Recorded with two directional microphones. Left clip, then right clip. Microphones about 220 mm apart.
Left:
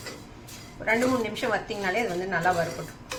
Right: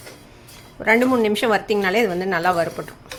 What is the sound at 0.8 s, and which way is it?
A woman's voice, 45° right (ahead or behind).